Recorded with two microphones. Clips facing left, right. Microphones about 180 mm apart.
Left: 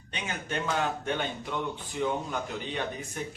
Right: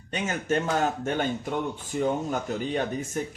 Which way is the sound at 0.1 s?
45° right (ahead or behind).